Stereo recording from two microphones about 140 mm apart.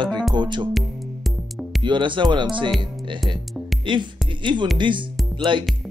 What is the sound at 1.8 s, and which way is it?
Speech, 35° right (ahead or behind).